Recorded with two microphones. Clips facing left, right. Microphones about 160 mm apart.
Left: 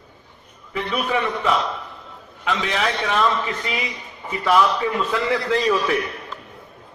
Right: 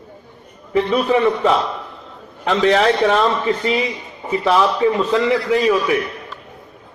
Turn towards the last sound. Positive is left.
turn(degrees=-15)  # may be behind; listen again after turning